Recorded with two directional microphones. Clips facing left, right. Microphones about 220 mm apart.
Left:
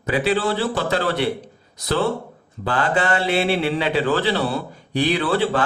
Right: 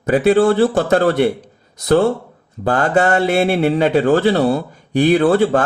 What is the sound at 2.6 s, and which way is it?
Speech, 45° right (ahead or behind).